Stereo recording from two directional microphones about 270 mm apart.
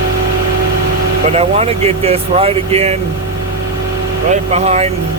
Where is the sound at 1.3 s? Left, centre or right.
Right.